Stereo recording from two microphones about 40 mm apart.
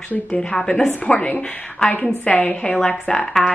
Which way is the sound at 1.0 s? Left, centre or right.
Left.